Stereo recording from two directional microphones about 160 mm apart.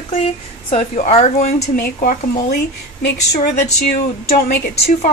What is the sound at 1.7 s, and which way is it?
Speech, 65° left (ahead or behind).